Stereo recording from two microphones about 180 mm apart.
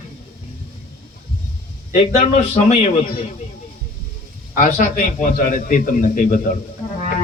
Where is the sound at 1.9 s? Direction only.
35° left (ahead or behind).